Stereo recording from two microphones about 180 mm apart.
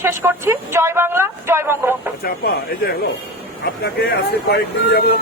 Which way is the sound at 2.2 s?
55° left (ahead or behind).